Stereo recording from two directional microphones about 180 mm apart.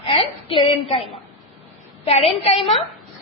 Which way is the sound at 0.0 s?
30° left (ahead or behind).